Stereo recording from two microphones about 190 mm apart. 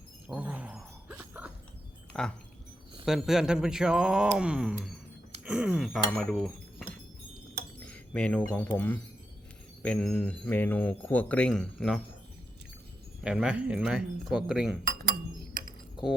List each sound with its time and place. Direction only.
0.3 s wind chime: 10° right (ahead or behind)
2.1 s speech: 5° left (ahead or behind)
13.2 s speech: 5° right (ahead or behind)